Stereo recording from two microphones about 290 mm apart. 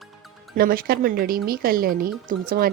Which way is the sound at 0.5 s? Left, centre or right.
Right.